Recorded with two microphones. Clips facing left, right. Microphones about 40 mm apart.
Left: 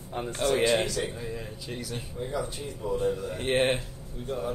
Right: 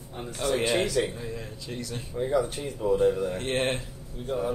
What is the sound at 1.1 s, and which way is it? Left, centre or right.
Speech, centre.